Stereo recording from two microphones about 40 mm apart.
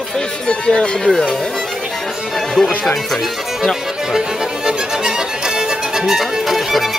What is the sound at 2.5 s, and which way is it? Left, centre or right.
Speech, centre.